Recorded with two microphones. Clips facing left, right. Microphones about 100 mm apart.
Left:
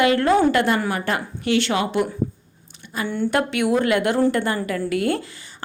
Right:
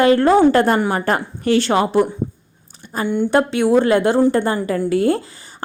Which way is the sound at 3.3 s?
30° right (ahead or behind).